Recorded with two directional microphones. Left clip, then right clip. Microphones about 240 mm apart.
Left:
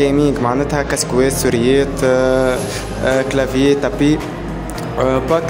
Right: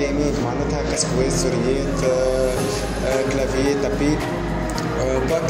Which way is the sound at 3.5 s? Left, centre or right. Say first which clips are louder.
Left 6 dB; left.